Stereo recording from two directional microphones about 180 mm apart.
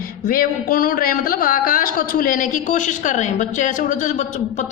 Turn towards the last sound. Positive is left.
turn(degrees=45)  # may be behind; listen again after turning